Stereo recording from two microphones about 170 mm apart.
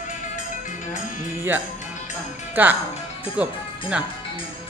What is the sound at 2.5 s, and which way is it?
Speech, 10° right (ahead or behind).